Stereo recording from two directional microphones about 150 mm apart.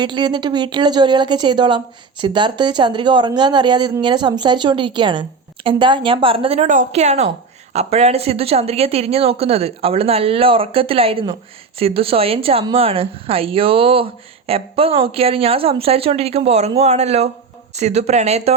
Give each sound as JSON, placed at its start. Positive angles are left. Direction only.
{"t": 0.0, "sound": "speech", "side_deg": -30}
{"t": 6.7, "sound": "speech", "side_deg": -55}